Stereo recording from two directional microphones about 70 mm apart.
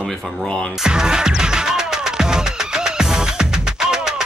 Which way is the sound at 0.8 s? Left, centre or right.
Centre.